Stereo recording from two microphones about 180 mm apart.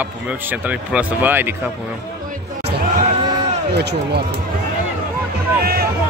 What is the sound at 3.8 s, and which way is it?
Speech, 65° right (ahead or behind).